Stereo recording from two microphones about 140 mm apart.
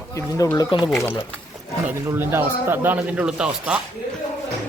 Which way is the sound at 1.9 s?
15° right (ahead or behind).